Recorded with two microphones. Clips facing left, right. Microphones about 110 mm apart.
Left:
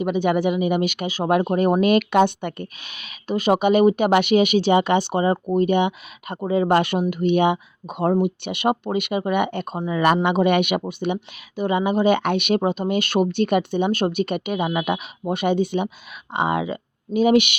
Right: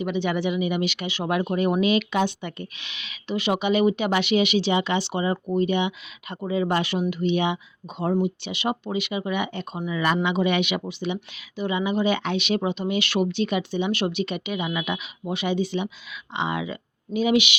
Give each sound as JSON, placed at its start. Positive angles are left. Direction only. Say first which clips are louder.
{"t": 0.0, "sound": "speech", "louder": "left 5 dB", "side_deg": 45}
{"t": 9.7, "sound": "speech", "louder": "left 3 dB", "side_deg": 40}
{"t": 10.2, "sound": "speech", "louder": "left 5 dB", "side_deg": 55}